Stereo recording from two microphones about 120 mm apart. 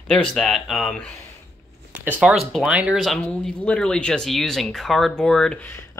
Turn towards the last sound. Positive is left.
turn(degrees=5)  # may be behind; listen again after turning